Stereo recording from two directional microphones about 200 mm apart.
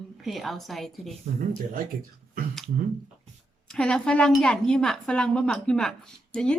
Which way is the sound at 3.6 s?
5° left (ahead or behind).